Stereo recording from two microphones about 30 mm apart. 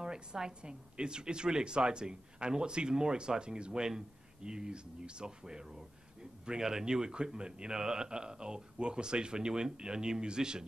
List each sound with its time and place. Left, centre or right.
0.0 s a man's voice: right